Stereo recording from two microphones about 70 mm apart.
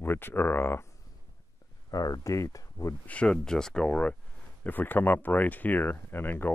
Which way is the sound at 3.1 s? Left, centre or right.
Centre.